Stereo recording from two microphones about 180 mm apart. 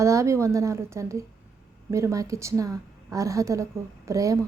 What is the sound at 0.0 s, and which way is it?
A woman's voice, 15° right (ahead or behind).